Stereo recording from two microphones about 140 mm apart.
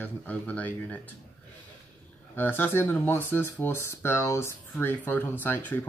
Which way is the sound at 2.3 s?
15° left (ahead or behind).